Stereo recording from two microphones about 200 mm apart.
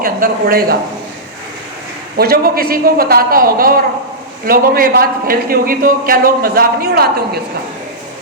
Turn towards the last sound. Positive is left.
turn(degrees=-50)  # may be behind; listen again after turning